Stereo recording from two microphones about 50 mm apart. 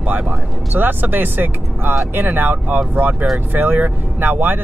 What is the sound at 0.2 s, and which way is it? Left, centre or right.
Speech, right.